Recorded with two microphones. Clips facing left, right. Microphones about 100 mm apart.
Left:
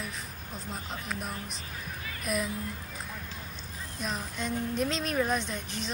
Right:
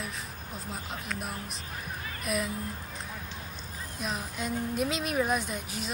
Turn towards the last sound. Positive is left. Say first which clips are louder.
# even
turn(degrees=-5)  # may be behind; listen again after turning